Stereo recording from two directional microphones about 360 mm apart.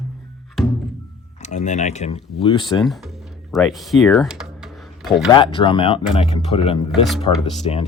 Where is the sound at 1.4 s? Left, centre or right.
Centre.